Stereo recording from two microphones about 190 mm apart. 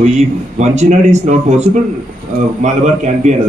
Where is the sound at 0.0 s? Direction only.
35° right (ahead or behind).